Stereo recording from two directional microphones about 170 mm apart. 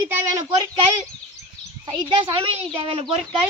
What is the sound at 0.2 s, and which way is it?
Speech, 20° right (ahead or behind).